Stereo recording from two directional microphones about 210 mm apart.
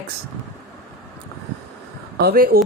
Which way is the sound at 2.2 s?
45° right (ahead or behind).